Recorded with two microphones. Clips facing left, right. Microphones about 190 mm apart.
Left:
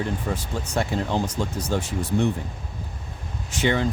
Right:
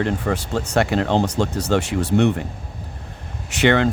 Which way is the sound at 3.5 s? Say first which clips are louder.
Right 6 dB; 70° right (ahead or behind).